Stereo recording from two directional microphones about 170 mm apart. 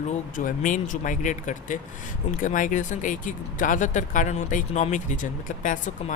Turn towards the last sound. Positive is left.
turn(degrees=50)  # may be behind; listen again after turning